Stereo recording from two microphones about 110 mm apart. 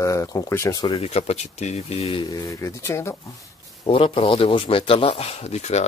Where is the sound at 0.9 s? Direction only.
65° left (ahead or behind).